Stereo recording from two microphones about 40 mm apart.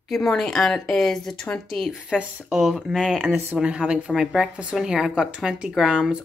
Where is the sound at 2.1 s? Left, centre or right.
Left.